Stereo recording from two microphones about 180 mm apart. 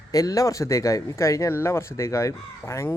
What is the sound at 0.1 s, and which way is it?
Speech, 20° left (ahead or behind).